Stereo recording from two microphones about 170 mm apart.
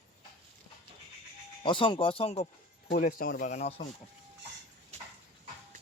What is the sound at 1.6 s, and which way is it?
Speech, 30° left (ahead or behind).